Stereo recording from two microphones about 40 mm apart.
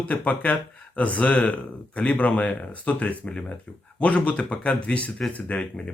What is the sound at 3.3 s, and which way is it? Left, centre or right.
Speech, centre.